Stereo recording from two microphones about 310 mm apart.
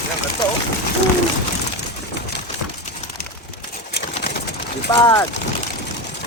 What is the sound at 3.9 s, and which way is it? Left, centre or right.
Pigeon, left.